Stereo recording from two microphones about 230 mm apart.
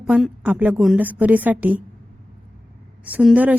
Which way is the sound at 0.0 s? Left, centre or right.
Centre.